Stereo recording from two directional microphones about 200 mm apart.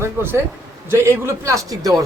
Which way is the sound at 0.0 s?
10° right (ahead or behind).